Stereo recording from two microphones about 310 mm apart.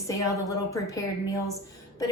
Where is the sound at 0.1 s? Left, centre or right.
Centre.